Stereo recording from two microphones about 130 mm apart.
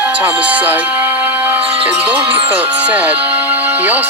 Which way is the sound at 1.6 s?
45° right (ahead or behind).